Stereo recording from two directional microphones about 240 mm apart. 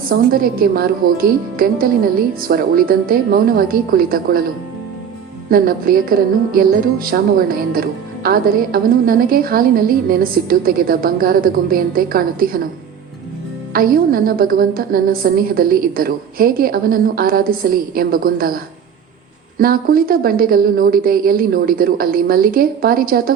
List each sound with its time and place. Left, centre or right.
0.1 s speech: right
5.5 s speech: right
13.7 s speech: right